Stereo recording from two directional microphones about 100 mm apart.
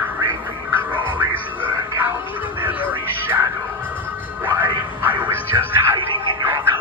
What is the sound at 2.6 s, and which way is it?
Music, 15° right (ahead or behind).